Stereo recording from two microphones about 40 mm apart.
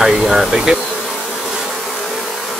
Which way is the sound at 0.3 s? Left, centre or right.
Centre.